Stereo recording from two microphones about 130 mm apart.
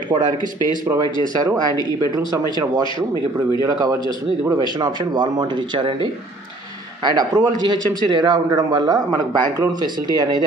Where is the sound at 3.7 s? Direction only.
30° right (ahead or behind).